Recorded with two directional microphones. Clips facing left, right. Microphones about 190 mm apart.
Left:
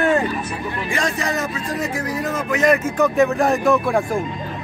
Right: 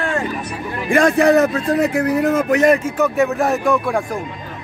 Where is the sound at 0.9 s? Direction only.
55° right (ahead or behind).